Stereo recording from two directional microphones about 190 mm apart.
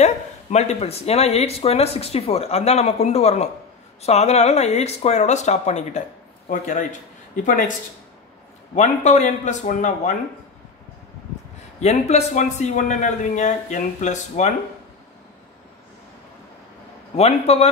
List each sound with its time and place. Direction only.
0.0 s speech: 35° left (ahead or behind)
8.7 s speech: 40° left (ahead or behind)
11.8 s speech: 35° left (ahead or behind)
17.2 s speech: 35° left (ahead or behind)